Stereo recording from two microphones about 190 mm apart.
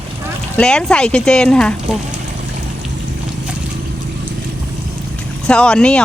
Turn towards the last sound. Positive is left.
turn(degrees=5)  # may be behind; listen again after turning